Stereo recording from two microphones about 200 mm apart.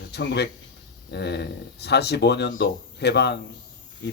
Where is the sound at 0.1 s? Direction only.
60° left (ahead or behind).